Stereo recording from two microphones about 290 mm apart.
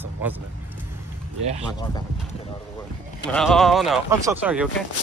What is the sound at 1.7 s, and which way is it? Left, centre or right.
Speech, centre.